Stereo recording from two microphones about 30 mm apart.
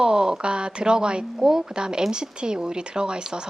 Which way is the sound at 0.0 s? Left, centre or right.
Right.